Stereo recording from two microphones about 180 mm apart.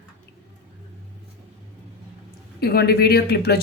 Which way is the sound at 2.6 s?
60° left (ahead or behind).